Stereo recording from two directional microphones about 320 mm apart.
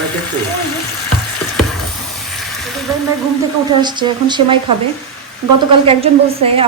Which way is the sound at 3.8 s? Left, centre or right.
Centre.